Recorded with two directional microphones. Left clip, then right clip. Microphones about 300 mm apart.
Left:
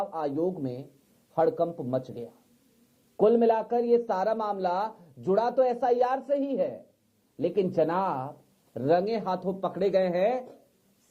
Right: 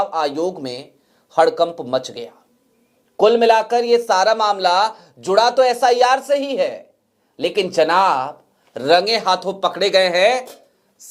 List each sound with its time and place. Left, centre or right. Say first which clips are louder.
0.0 s speech: right 10 dB; centre
1.7 s speech: right 10 dB; right
2.0 s speech: right 10 dB; centre